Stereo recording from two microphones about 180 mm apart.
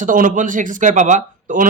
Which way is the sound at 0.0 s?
50° right (ahead or behind).